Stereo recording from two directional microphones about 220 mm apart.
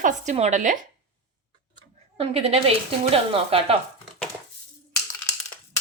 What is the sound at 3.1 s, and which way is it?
Speech, 25° right (ahead or behind).